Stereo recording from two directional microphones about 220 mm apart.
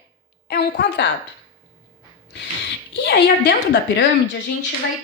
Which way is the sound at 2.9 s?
50° left (ahead or behind).